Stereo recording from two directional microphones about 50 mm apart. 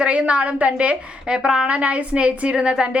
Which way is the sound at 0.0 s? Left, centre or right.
Right.